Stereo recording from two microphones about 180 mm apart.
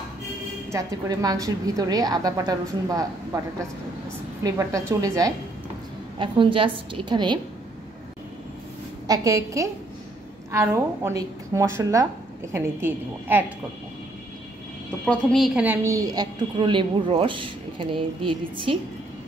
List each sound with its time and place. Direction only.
0.7 s a woman's voice: 20° right (ahead or behind)
4.4 s a woman's voice: 20° right (ahead or behind)
6.1 s a woman's voice: 30° right (ahead or behind)
9.0 s a woman's voice: 20° right (ahead or behind)
15.0 s a woman's voice: centre (ahead or behind); by 18.8 s 30° right (ahead or behind)